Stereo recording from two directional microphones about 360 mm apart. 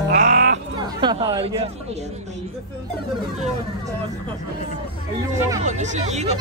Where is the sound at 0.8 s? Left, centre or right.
Centre.